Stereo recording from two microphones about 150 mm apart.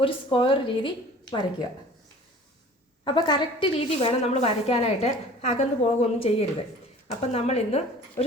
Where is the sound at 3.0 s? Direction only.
30° left (ahead or behind).